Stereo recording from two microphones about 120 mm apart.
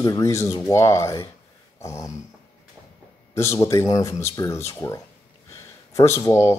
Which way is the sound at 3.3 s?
25° left (ahead or behind).